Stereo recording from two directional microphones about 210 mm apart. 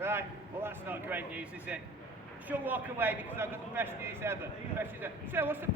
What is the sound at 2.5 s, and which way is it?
A man's voice, 10° right (ahead or behind).